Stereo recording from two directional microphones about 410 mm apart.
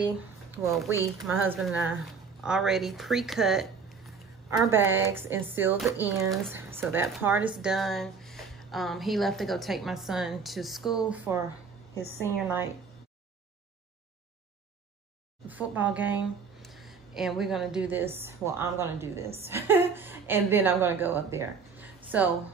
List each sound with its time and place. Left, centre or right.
0.7 s speech: centre
15.4 s a woman's voice: centre